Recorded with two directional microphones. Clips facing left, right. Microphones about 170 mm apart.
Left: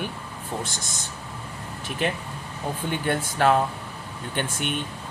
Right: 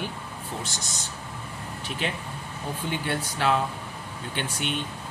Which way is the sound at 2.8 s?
50° left (ahead or behind).